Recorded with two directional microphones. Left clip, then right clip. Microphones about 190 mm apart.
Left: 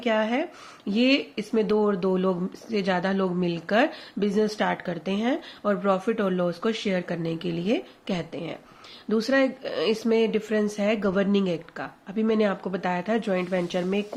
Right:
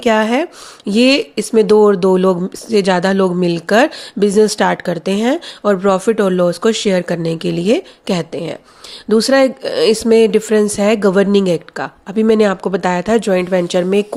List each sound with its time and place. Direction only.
0.0 s speech: 55° right (ahead or behind)